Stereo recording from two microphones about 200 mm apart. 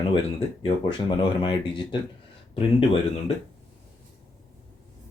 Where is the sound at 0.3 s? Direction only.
25° left (ahead or behind).